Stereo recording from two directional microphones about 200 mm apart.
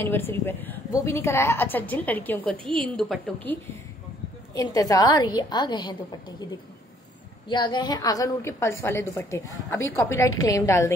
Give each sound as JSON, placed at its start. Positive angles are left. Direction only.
{"t": 0.0, "sound": "a woman's voice", "side_deg": 10}
{"t": 2.5, "sound": "a woman's voice", "side_deg": -25}
{"t": 2.8, "sound": "a woman's voice", "side_deg": 5}
{"t": 4.6, "sound": "a woman's voice", "side_deg": 15}
{"t": 7.4, "sound": "a woman's voice", "side_deg": 20}